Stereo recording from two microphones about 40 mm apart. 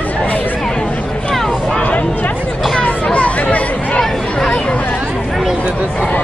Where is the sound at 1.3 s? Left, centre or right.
Centre.